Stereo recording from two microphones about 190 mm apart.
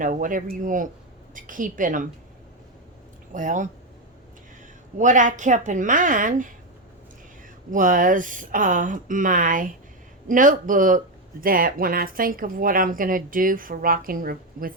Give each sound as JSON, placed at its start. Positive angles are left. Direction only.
{"t": 0.0, "sound": "speech", "side_deg": -45}
{"t": 3.3, "sound": "speech", "side_deg": -40}
{"t": 4.9, "sound": "a woman's voice", "side_deg": -40}
{"t": 7.7, "sound": "speech", "side_deg": -45}